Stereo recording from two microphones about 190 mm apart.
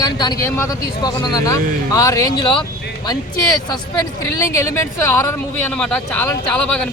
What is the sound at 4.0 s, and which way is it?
Speech, 15° left (ahead or behind).